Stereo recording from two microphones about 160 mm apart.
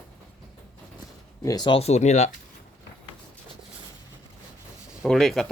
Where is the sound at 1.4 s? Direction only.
25° left (ahead or behind); by 2.3 s 45° left (ahead or behind).